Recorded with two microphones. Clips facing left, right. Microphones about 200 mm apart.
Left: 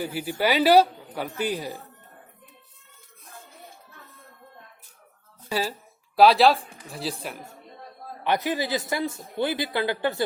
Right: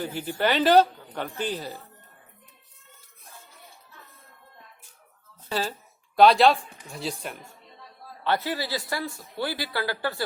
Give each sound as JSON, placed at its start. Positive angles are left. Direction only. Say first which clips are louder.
{"t": 0.0, "sound": "speech", "louder": "left 1 dB", "side_deg": 10}
{"t": 5.5, "sound": "a man's voice", "louder": "left 1 dB", "side_deg": 10}
{"t": 8.2, "sound": "speech", "louder": "left 2 dB", "side_deg": 15}